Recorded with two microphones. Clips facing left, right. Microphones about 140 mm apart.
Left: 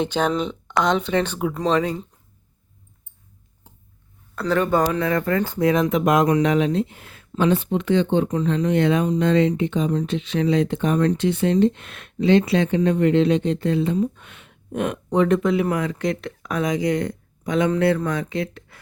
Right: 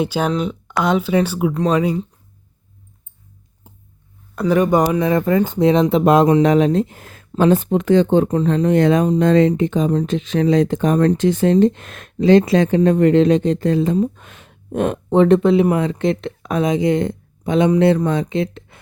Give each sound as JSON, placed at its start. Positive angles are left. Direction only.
{"t": 0.0, "sound": "speech", "side_deg": -10}
{"t": 4.4, "sound": "speech", "side_deg": -15}